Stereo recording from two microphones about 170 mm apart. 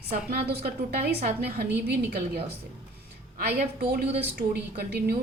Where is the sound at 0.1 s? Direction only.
70° right (ahead or behind).